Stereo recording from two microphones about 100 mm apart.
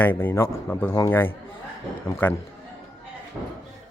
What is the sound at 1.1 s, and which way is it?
Speech, 20° left (ahead or behind).